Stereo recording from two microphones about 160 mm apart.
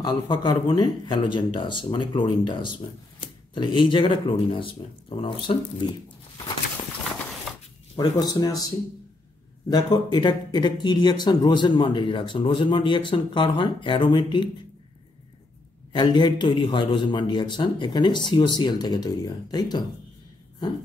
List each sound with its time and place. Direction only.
0.0 s speech: 30° left (ahead or behind)
7.9 s speech: 25° left (ahead or behind)
9.7 s speech: 25° left (ahead or behind)
15.9 s speech: 30° left (ahead or behind)